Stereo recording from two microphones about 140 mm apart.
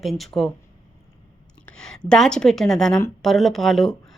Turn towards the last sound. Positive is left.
turn(degrees=0)  # may be behind; listen again after turning